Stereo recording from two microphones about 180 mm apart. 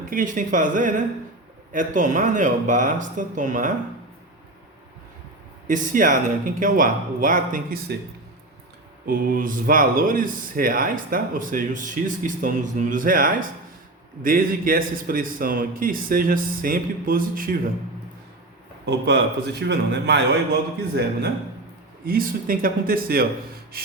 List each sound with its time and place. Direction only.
0.1 s speech: 50° right (ahead or behind)
5.6 s speech: 45° right (ahead or behind)
9.0 s speech: 50° right (ahead or behind)
18.9 s a man's voice: 70° right (ahead or behind)
22.0 s speech: 55° right (ahead or behind)